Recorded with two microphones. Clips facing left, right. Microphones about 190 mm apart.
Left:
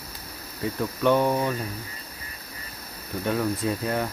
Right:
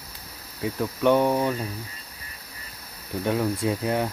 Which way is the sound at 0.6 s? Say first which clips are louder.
Right 1 dB; 15° right (ahead or behind).